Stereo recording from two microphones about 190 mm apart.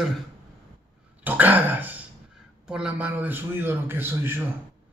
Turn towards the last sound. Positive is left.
turn(degrees=-10)  # may be behind; listen again after turning